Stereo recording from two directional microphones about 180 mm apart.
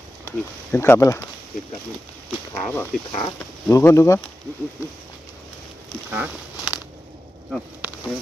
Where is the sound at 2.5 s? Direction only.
10° left (ahead or behind).